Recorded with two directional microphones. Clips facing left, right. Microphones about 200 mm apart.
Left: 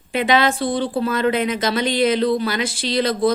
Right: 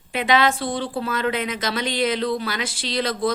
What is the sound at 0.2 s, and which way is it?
A woman's voice, centre (ahead or behind).